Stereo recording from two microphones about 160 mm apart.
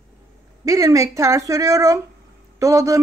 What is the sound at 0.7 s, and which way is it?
A woman's voice, 20° right (ahead or behind).